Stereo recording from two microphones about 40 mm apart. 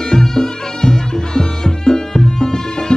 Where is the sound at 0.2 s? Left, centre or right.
Centre.